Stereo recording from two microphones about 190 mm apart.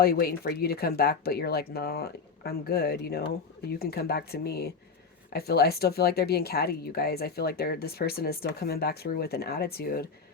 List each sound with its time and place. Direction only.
0.0 s speech: 55° left (ahead or behind)